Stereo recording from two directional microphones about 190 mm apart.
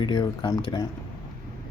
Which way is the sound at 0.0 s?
20° left (ahead or behind).